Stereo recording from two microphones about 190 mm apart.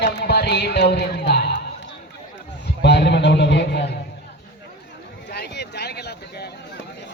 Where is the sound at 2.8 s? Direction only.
65° left (ahead or behind).